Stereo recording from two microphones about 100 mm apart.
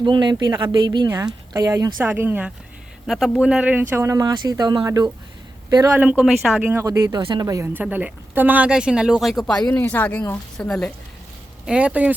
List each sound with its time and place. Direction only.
0.0 s speech: 50° right (ahead or behind)
2.0 s speech: 20° right (ahead or behind)
3.1 s speech: 5° right (ahead or behind); by 5.1 s 40° right (ahead or behind)
6.0 s speech: 10° right (ahead or behind)
6.8 s speech: 35° right (ahead or behind)
7.7 s speech: 15° right (ahead or behind); by 9.6 s 5° left (ahead or behind)
9.7 s speech: 15° left (ahead or behind)
11.6 s speech: 10° right (ahead or behind)